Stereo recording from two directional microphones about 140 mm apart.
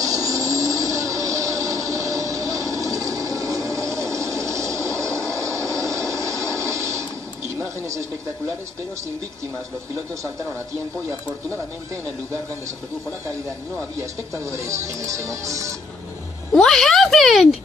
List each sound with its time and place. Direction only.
0.0 s vehicle: 25° right (ahead or behind)
5.9 s television: 20° right (ahead or behind)
14.3 s speech: 20° right (ahead or behind)
16.5 s speech: 5° left (ahead or behind)